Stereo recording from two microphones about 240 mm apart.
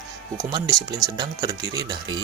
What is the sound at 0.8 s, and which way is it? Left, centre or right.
Speech, centre.